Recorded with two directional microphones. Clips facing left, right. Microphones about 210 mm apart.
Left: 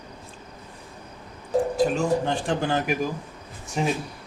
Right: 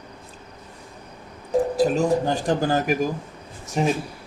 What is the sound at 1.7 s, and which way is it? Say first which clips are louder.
Speech: right 3 dB; 40° right (ahead or behind).